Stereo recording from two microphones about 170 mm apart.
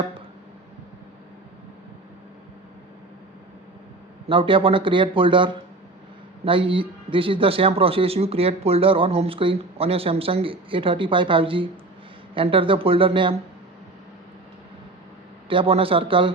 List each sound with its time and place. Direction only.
4.3 s a man's voice: 30° right (ahead or behind)
15.4 s a man's voice: 30° right (ahead or behind)